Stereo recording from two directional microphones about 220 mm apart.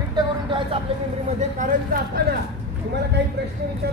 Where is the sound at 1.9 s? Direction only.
40° right (ahead or behind).